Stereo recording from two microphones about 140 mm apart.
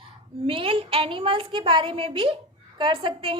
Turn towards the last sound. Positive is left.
turn(degrees=-40)  # may be behind; listen again after turning